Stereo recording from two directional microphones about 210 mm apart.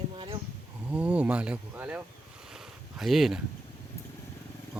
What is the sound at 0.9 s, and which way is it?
Speech, 5° right (ahead or behind).